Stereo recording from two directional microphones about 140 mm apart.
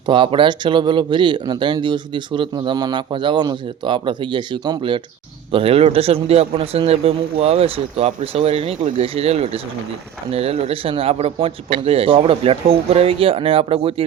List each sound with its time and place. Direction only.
0.0 s a man's voice: 35° right (ahead or behind)